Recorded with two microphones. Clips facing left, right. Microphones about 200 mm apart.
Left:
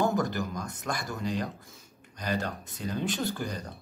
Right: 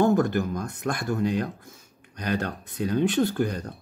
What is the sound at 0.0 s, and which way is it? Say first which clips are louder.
Speech: right 6 dB; 55° right (ahead or behind).